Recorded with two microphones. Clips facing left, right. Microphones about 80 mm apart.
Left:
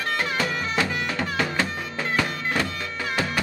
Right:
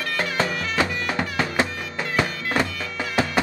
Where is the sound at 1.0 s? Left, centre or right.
Right.